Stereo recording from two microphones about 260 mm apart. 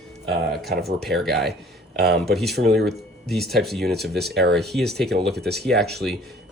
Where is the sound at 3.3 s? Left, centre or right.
Centre.